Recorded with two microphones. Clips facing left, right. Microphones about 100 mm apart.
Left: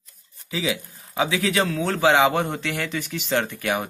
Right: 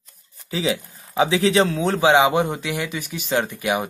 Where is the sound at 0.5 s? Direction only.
30° right (ahead or behind).